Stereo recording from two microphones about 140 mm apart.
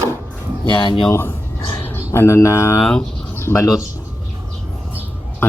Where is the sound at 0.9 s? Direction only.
20° left (ahead or behind).